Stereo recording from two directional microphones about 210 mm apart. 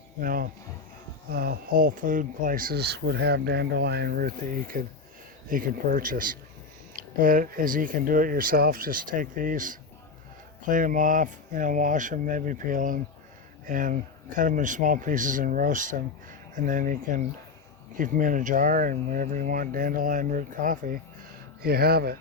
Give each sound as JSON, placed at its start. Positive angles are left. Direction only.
{"t": 0.2, "sound": "speech", "side_deg": -40}